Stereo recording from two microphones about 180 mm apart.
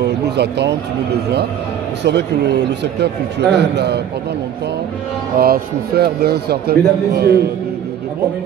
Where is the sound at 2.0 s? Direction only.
70° right (ahead or behind).